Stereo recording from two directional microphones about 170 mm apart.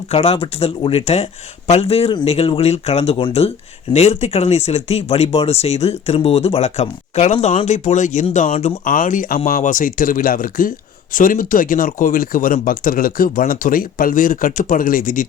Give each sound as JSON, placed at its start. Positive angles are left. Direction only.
{"t": 0.1, "sound": "speech", "side_deg": 35}
{"t": 8.8, "sound": "speech", "side_deg": 55}